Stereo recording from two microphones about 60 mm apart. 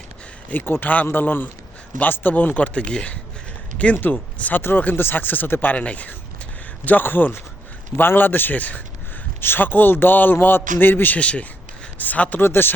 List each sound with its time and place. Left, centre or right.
0.5 s a man's voice: left
3.9 s a man's voice: left
11.2 s speech: left
12.4 s a man's voice: left